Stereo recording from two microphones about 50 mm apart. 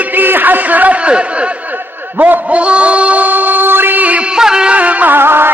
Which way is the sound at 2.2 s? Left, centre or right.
Right.